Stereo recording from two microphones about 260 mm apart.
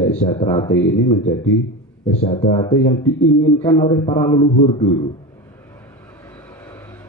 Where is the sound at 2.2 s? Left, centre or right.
Left.